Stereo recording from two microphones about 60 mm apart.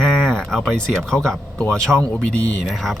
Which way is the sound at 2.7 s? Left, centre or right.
Centre.